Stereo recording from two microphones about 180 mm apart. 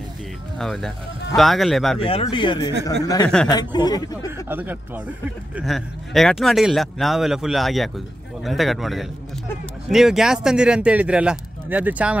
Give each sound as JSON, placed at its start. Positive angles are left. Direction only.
{"t": 0.6, "sound": "speech", "side_deg": 0}
{"t": 2.0, "sound": "speech", "side_deg": 30}
{"t": 4.5, "sound": "speech", "side_deg": -10}